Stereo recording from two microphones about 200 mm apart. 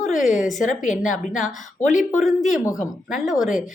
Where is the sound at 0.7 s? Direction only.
40° left (ahead or behind).